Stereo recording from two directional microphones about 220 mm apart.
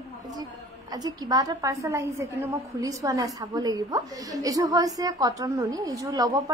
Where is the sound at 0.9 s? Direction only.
15° right (ahead or behind).